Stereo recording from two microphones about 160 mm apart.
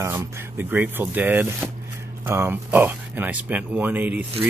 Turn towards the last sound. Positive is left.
turn(degrees=-10)  # may be behind; listen again after turning